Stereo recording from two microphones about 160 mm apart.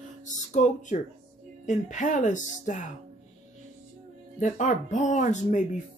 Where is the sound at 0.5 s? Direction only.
50° left (ahead or behind).